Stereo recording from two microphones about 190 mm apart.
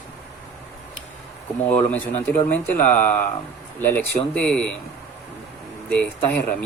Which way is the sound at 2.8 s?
40° left (ahead or behind).